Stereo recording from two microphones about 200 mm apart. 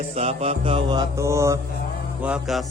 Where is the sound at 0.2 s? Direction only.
30° right (ahead or behind); by 1.5 s 15° right (ahead or behind).